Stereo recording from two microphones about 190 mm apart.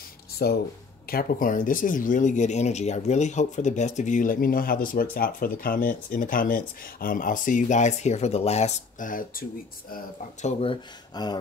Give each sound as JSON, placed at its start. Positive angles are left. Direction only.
{"t": 0.4, "sound": "speech", "side_deg": 55}
{"t": 1.1, "sound": "speech", "side_deg": 45}
{"t": 10.6, "sound": "speech", "side_deg": 25}